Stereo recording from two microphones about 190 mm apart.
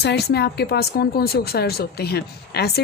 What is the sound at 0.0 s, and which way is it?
Speech, 60° left (ahead or behind).